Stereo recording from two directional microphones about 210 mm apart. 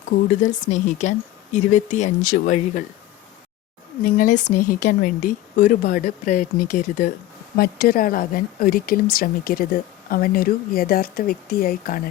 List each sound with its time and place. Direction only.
0.5 s speech: 35° left (ahead or behind)
4.0 s speech: 40° left (ahead or behind)